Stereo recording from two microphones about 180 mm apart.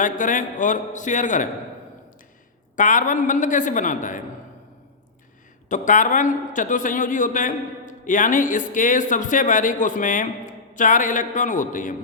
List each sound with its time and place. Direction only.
0.0 s a man's voice: 45° left (ahead or behind)
2.7 s a man's voice: 45° left (ahead or behind)
5.6 s a man's voice: 45° left (ahead or behind)